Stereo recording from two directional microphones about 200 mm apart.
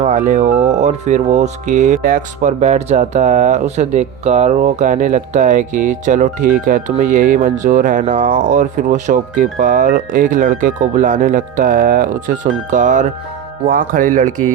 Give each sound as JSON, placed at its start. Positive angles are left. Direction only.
{"t": 0.0, "sound": "speech", "side_deg": -40}